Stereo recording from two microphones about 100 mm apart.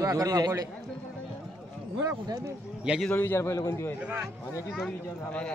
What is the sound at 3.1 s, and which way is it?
Speech, 20° left (ahead or behind).